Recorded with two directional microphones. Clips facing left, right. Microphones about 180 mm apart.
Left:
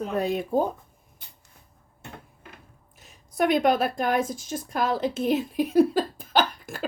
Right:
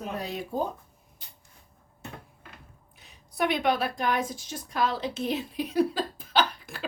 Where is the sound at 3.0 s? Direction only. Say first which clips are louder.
Left 4 dB; 45° left (ahead or behind).